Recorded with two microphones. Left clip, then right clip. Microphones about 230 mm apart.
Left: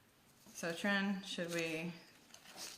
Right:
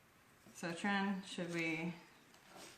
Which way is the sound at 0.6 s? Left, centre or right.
Centre.